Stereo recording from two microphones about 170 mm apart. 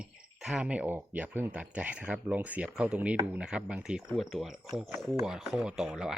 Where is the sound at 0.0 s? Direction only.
5° right (ahead or behind).